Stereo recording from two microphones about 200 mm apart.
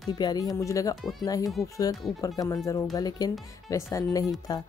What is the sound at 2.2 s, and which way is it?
A woman's voice, 15° left (ahead or behind).